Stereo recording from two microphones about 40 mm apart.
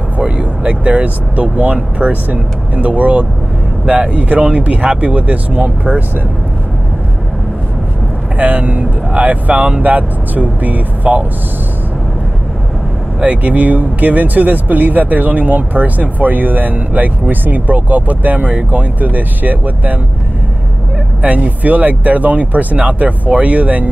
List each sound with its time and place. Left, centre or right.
0.2 s speech: right
8.4 s speech: right
13.2 s speech: right
21.2 s speech: right